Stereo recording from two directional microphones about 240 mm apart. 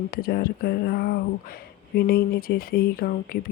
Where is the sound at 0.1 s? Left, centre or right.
Left.